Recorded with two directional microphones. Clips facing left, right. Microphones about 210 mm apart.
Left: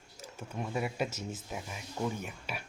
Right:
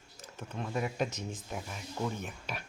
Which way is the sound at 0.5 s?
10° left (ahead or behind).